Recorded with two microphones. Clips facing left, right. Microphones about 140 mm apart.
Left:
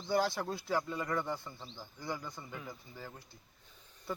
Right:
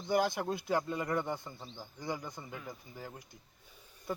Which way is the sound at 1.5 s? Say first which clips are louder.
Right 1 dB; 5° right (ahead or behind).